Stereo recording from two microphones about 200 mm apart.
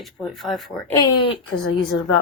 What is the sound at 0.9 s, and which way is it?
Speech, 20° left (ahead or behind).